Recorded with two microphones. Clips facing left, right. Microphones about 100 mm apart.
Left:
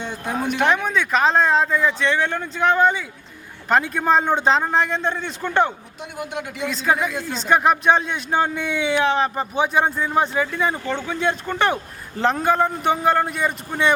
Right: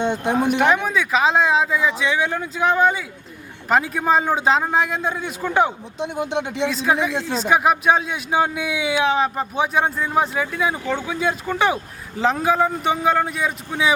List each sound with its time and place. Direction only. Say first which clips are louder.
0.0 s speech: right 6 dB; 20° right (ahead or behind)
0.4 s a man's voice: even; 5° right (ahead or behind)
6.0 s speech: right 7 dB; 25° right (ahead or behind)
6.7 s a man's voice: left 3 dB; centre (ahead or behind)
7.1 s speech: right 3 dB; 20° right (ahead or behind)
7.3 s a man's voice: even; 5° right (ahead or behind)